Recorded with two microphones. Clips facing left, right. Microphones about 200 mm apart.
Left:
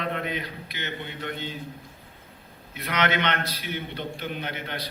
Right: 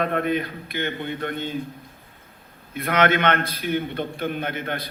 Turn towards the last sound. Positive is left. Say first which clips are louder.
# right 5 dB
turn(degrees=-50)  # may be behind; listen again after turning